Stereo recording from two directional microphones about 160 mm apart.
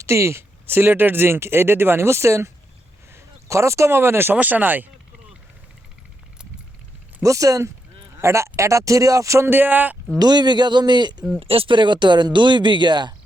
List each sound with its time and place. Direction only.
0.0 s speech: 15° right (ahead or behind)
7.2 s speech: 20° right (ahead or behind)
10.2 s speech: 25° right (ahead or behind)